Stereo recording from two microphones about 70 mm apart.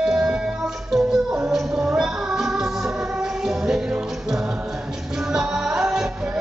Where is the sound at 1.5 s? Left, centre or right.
Centre.